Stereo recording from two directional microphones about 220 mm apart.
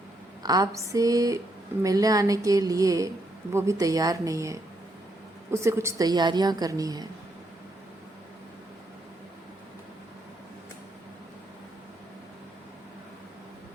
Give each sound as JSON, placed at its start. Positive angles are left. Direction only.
{"t": 0.4, "sound": "a woman's voice", "side_deg": -15}